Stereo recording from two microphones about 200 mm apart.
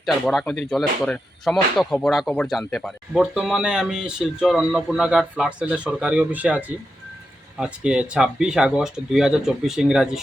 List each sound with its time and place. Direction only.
0.0 s speech: centre (ahead or behind)